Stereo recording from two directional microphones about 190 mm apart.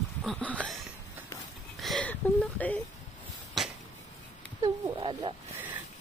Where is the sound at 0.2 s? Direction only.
5° left (ahead or behind).